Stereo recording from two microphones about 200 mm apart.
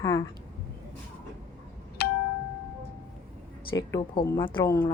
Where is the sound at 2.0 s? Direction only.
50° left (ahead or behind).